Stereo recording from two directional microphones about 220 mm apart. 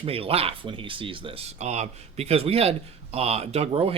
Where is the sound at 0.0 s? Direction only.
25° right (ahead or behind).